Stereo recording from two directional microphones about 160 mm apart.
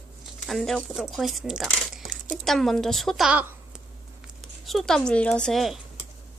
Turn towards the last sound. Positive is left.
turn(degrees=0)  # may be behind; listen again after turning